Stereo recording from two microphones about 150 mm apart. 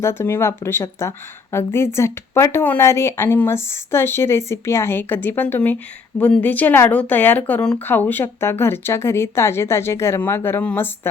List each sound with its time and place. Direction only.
0.0 s speech: 15° left (ahead or behind)